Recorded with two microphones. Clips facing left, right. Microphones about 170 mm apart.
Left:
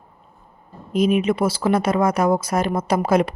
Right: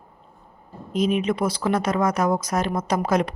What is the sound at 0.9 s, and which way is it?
A woman's voice, 10° left (ahead or behind).